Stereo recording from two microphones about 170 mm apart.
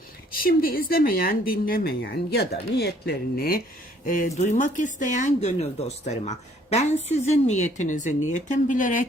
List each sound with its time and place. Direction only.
0.3 s speech: 60° left (ahead or behind)
4.0 s speech: 50° left (ahead or behind)